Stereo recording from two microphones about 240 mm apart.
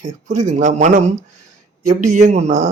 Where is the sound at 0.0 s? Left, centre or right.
Right.